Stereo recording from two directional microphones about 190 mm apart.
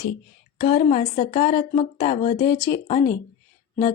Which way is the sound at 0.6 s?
30° left (ahead or behind).